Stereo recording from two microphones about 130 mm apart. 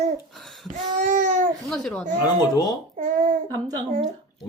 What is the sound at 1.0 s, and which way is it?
Babbling, 75° right (ahead or behind).